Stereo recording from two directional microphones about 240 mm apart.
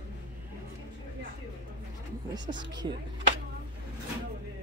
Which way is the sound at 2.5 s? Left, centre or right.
Right.